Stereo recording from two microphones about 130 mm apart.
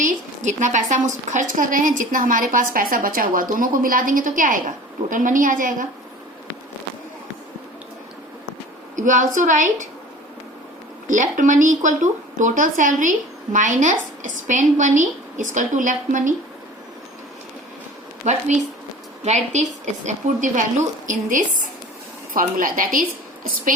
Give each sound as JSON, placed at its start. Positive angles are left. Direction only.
{"t": 0.0, "sound": "a woman's voice", "side_deg": -70}
{"t": 9.0, "sound": "a woman's voice", "side_deg": -80}
{"t": 11.1, "sound": "a woman's voice", "side_deg": -75}
{"t": 19.2, "sound": "a woman's voice", "side_deg": -65}